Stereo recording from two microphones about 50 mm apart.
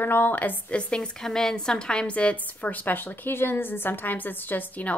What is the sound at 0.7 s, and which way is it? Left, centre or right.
Speech, left.